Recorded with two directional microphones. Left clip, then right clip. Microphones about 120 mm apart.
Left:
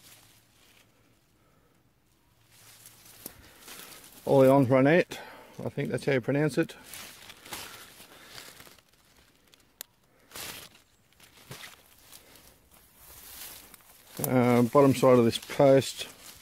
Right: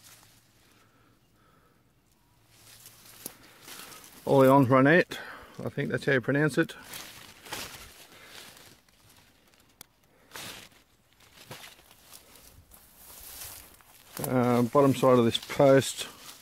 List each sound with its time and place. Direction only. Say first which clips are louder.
4.3 s speech: even; centre (ahead or behind)
14.2 s a sound: left 2 dB; 45° left (ahead or behind); by 15.3 s 30° left (ahead or behind)
15.3 s speech: even; 5° left (ahead or behind)